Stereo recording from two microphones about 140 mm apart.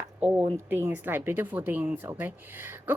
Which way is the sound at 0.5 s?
15° right (ahead or behind).